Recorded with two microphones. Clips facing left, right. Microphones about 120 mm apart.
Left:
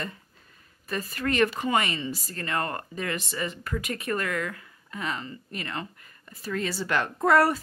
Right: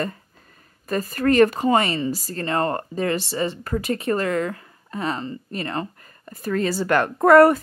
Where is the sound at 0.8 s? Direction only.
45° right (ahead or behind).